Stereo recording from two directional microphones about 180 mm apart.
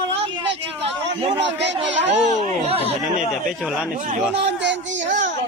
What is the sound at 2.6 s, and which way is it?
Speech, 35° right (ahead or behind).